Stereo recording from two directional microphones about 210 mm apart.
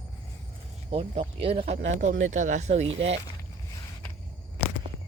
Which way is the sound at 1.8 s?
40° right (ahead or behind).